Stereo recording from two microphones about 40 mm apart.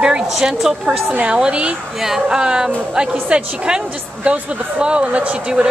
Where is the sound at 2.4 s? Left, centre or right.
Centre.